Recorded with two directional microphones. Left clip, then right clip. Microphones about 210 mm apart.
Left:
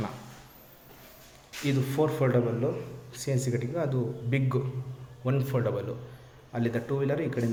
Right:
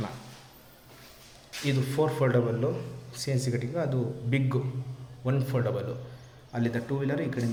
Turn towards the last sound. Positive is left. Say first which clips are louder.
# left 2 dB
turn(degrees=5)  # may be behind; listen again after turning